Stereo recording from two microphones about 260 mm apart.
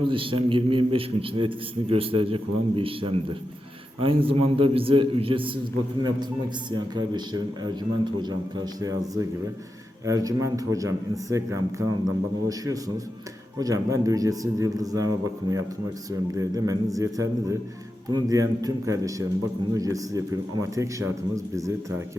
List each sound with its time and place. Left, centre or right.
0.0 s a man's voice: centre